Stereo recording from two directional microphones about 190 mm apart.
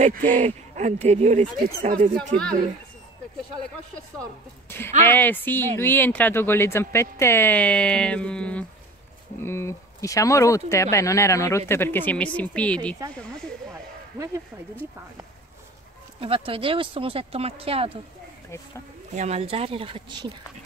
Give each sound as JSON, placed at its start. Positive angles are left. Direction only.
{"t": 0.0, "sound": "speech", "side_deg": -40}
{"t": 4.6, "sound": "speech", "side_deg": 10}
{"t": 14.1, "sound": "speech", "side_deg": -15}
{"t": 16.2, "sound": "speech", "side_deg": -30}
{"t": 19.1, "sound": "speech", "side_deg": -35}